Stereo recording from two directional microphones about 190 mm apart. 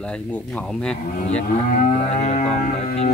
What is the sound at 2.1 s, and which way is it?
Music, 35° left (ahead or behind).